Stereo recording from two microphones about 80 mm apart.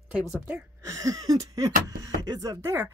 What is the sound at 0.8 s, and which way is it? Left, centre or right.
A woman's voice, right.